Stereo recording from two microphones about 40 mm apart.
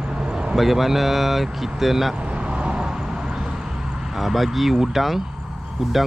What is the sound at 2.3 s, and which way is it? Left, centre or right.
Vehicle, right.